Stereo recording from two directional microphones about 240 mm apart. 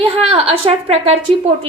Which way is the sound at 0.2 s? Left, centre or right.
Right.